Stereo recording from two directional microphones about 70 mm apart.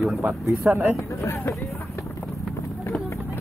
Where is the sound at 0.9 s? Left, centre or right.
Left.